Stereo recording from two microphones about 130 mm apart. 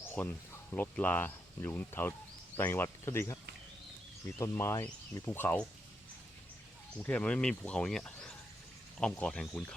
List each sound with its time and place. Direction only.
0.0 s a sound: 15° left (ahead or behind)
0.7 s speech: 15° left (ahead or behind)
4.4 s speech: 20° left (ahead or behind)
7.0 s speech: 10° left (ahead or behind)